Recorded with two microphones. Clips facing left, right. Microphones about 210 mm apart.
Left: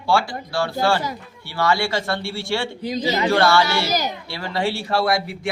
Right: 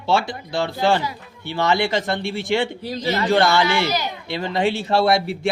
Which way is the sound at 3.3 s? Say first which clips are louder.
Right 1 dB; 20° right (ahead or behind).